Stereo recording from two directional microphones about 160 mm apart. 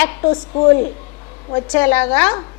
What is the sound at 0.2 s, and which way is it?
Speech, 30° left (ahead or behind).